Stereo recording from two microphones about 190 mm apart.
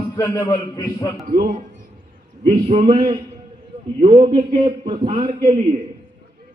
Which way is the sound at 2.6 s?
30° right (ahead or behind).